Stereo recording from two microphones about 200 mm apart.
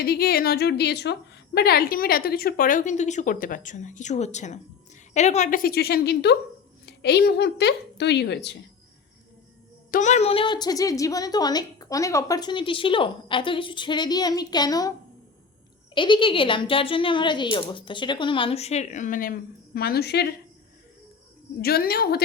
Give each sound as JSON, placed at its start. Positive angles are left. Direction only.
{"t": 0.0, "sound": "a woman's voice", "side_deg": 50}
{"t": 9.9, "sound": "a woman's voice", "side_deg": 35}
{"t": 16.0, "sound": "a woman's voice", "side_deg": 25}
{"t": 21.6, "sound": "a woman's voice", "side_deg": 50}